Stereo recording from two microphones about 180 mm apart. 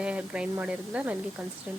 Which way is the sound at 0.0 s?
5° right (ahead or behind).